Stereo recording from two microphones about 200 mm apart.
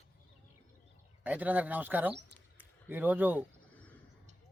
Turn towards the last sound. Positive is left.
turn(degrees=-10)  # may be behind; listen again after turning